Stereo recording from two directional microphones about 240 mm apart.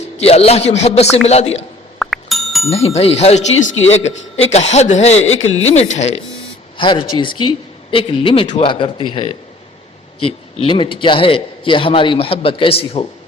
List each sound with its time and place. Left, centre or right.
0.2 s a man's voice: left
2.0 s music: centre
2.6 s a man's voice: left